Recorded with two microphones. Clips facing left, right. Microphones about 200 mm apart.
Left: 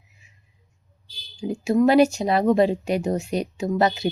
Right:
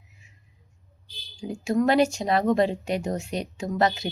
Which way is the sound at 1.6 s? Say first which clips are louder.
Left 4 dB; 10° left (ahead or behind).